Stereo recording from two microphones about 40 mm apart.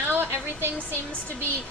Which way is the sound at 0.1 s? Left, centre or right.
Right.